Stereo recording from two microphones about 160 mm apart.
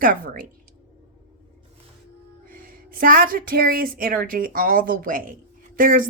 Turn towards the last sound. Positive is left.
turn(degrees=-60)  # may be behind; listen again after turning